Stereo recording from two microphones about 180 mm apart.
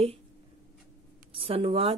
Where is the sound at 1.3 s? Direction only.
30° right (ahead or behind).